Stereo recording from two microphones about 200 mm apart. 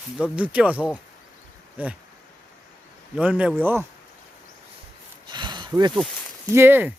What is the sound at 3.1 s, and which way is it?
Speech, 5° right (ahead or behind).